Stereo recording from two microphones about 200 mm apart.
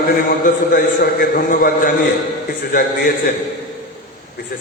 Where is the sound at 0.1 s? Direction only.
45° left (ahead or behind).